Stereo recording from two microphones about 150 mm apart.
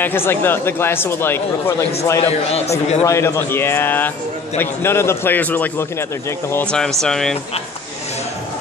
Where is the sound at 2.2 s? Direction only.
45° left (ahead or behind).